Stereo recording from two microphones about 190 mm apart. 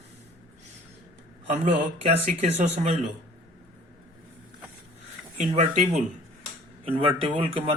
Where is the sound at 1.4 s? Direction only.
40° right (ahead or behind).